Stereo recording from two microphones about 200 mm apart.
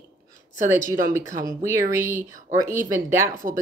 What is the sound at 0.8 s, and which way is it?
Speech, 40° right (ahead or behind).